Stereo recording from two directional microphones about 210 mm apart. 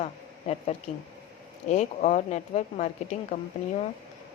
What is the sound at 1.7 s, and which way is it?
A woman's voice, 35° left (ahead or behind).